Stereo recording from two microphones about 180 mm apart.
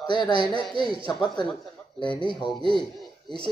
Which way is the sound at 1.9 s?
25° left (ahead or behind).